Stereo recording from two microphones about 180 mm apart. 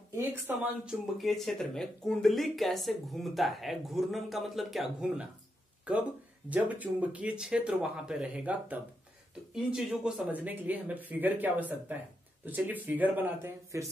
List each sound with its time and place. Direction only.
0.1 s speech: 15° right (ahead or behind)
1.1 s speech: centre (ahead or behind)